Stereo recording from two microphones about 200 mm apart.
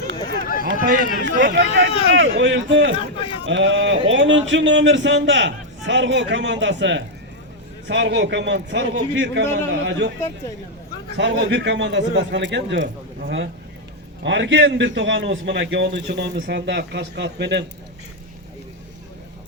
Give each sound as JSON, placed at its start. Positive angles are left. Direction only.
{"t": 0.1, "sound": "run", "side_deg": -65}
{"t": 1.2, "sound": "a man's voice", "side_deg": -65}
{"t": 1.9, "sound": "speech", "side_deg": 30}
{"t": 2.4, "sound": "a man's voice", "side_deg": -65}
{"t": 11.2, "sound": "a man's voice", "side_deg": -60}